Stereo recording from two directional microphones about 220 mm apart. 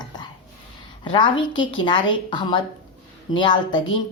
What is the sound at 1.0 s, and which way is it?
Speech, 20° left (ahead or behind).